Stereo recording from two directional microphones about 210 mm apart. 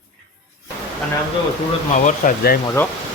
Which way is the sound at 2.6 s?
15° left (ahead or behind).